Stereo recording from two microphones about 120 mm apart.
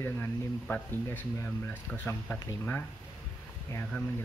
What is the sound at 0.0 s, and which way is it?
Speech, 20° left (ahead or behind).